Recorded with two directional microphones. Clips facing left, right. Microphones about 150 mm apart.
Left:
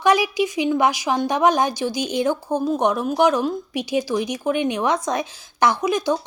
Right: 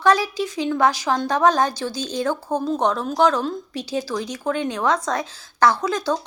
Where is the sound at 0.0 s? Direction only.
15° left (ahead or behind).